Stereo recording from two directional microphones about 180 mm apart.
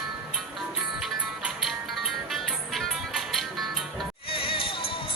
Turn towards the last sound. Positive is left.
turn(degrees=30)  # may be behind; listen again after turning